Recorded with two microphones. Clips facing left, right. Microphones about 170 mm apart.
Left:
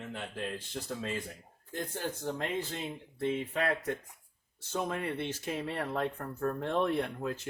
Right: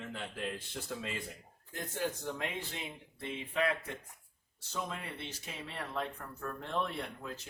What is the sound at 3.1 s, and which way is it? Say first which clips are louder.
Speech: left 4 dB; 55° left (ahead or behind).